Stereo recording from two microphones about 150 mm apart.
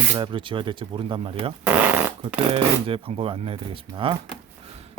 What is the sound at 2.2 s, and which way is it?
Speech, 40° right (ahead or behind).